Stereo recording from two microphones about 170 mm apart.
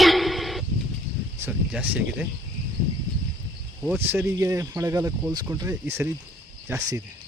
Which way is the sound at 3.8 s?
10° right (ahead or behind).